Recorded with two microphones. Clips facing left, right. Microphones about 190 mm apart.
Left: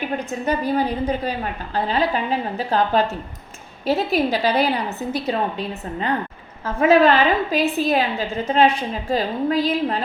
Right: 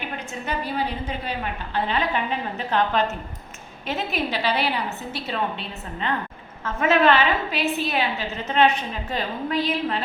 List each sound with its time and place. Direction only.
0.3 s a woman's voice: 40° left (ahead or behind)